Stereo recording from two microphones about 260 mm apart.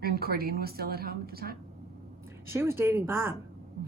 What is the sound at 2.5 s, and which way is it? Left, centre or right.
Speech, centre.